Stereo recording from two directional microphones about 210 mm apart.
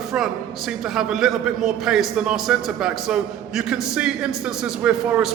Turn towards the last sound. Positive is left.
turn(degrees=-5)  # may be behind; listen again after turning